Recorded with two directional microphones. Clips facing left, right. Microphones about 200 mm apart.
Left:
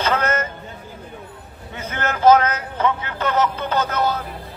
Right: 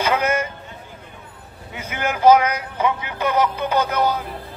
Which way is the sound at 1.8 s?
10° right (ahead or behind).